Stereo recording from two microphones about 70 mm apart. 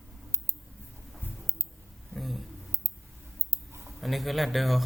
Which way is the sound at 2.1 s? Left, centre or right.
Centre.